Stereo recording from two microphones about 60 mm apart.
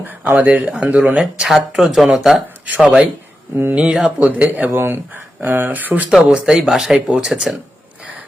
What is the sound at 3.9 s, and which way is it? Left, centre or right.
Speech, centre.